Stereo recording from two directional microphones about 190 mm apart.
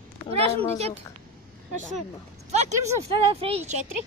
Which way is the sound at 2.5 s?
35° right (ahead or behind).